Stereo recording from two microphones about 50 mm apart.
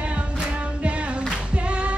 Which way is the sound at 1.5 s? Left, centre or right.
Right.